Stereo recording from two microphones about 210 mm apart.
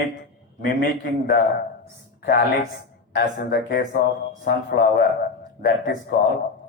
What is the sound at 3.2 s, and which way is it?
A man's voice, 50° left (ahead or behind).